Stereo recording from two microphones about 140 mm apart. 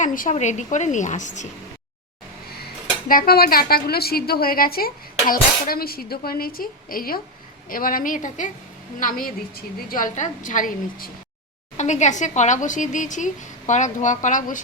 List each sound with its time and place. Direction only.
0.0 s a woman's voice: 70° left (ahead or behind)
0.3 s a woman's voice: 55° left (ahead or behind)
3.1 s a woman's voice: 90° left; by 8.4 s 65° left (ahead or behind)
9.0 s a woman's voice: 85° left; by 11.1 s 70° left (ahead or behind)
11.8 s a woman's voice: 60° left (ahead or behind)